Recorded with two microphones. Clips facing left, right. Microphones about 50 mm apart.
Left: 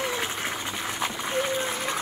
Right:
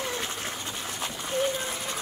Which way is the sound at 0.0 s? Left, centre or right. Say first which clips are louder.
Left 4 dB; left.